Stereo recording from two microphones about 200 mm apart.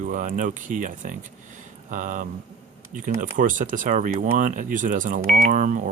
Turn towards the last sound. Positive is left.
turn(degrees=-40)  # may be behind; listen again after turning